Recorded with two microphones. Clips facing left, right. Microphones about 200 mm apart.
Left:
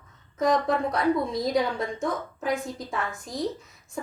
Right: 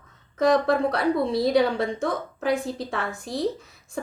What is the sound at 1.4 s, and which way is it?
Speech, 70° right (ahead or behind).